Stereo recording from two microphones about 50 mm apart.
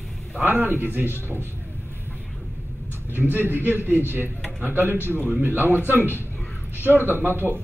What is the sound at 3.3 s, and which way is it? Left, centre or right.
A man's voice, right.